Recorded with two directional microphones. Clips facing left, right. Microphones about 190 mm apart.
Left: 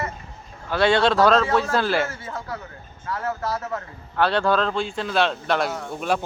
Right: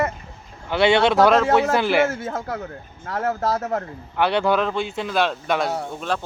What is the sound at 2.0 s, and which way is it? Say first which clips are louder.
A man's voice: right 6 dB; 50° right (ahead or behind).